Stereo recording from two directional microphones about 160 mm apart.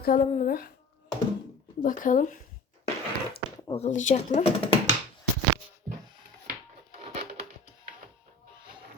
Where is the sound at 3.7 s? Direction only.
45° left (ahead or behind).